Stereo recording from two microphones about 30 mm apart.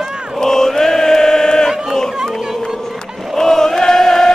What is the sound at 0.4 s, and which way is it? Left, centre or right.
Chant, centre.